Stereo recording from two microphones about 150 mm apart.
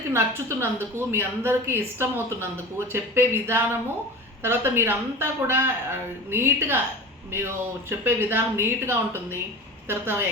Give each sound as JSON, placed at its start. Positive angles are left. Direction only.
{"t": 0.1, "sound": "a woman's voice", "side_deg": -15}